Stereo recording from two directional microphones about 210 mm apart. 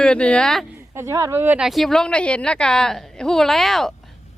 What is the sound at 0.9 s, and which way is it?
Speech, 15° right (ahead or behind).